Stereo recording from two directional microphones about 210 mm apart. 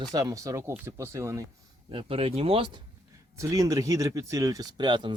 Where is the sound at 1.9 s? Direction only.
25° right (ahead or behind).